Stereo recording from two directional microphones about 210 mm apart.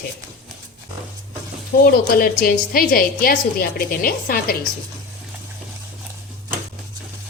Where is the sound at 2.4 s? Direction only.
45° left (ahead or behind).